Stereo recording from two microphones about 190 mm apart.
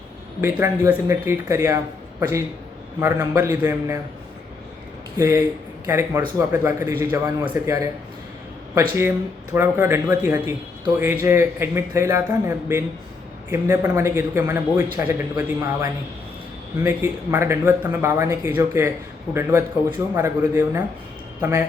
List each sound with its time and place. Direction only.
0.4 s speech: 15° right (ahead or behind)
3.0 s speech: 15° right (ahead or behind)
5.1 s speech: 15° right (ahead or behind)